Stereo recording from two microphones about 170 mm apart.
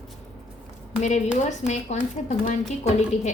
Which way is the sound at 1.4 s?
45° left (ahead or behind).